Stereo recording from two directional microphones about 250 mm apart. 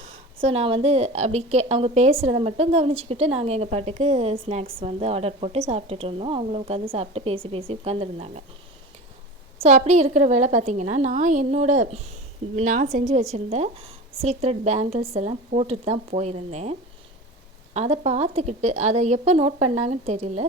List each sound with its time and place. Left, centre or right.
0.3 s a woman's voice: right
9.6 s a woman's voice: right
17.7 s a woman's voice: right